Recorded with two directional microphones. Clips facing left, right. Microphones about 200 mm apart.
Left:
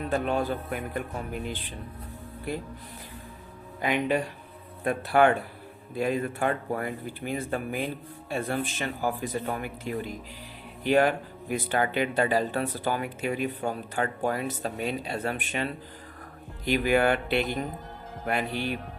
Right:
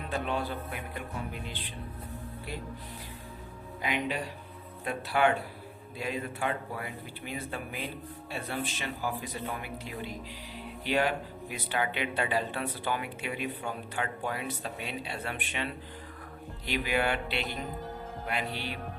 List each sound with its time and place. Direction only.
0.1 s speech: 45° left (ahead or behind)
3.8 s speech: 50° left (ahead or behind)